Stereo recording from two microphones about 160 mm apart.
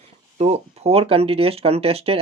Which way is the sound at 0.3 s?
40° right (ahead or behind).